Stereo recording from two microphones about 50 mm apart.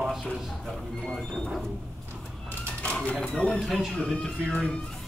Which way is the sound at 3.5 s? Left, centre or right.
Centre.